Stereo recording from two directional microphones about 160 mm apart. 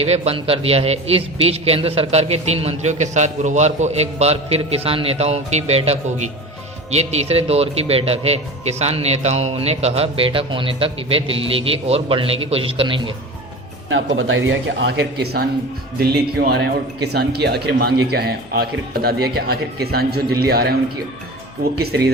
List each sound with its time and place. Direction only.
0.0 s a man's voice: 40° right (ahead or behind)
14.8 s a man's voice: 90° right